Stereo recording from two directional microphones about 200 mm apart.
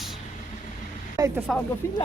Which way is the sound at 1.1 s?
15° right (ahead or behind).